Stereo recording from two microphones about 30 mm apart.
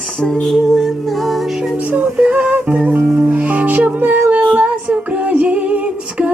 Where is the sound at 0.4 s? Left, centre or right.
Centre.